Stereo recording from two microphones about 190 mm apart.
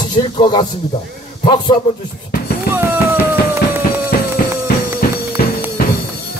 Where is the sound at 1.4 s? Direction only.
25° left (ahead or behind).